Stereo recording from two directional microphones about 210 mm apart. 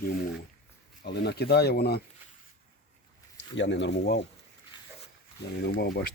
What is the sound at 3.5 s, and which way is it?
Speech, 60° left (ahead or behind).